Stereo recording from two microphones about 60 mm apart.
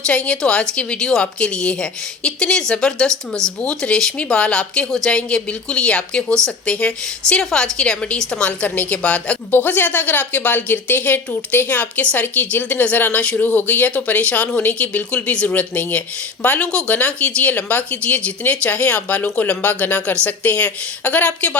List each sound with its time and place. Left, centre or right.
0.0 s a woman's voice: centre
8.4 s speech: left
9.0 s speech: centre
9.5 s a woman's voice: left